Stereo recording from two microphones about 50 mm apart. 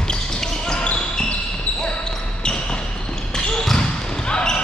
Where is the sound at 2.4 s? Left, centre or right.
Centre.